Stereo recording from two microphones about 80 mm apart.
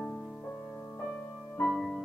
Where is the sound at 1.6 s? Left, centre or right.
Centre.